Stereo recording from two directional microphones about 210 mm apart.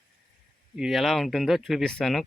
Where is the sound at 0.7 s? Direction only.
Centre (ahead or behind).